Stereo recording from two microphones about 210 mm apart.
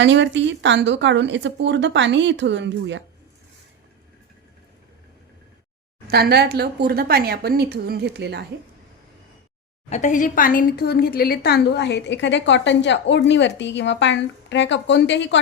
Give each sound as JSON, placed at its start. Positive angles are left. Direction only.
{"t": 0.0, "sound": "speech", "side_deg": -60}
{"t": 6.1, "sound": "speech", "side_deg": -50}
{"t": 9.9, "sound": "a woman's voice", "side_deg": 35}